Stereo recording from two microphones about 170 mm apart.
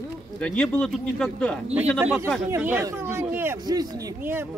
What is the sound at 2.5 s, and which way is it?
Speech, 15° right (ahead or behind).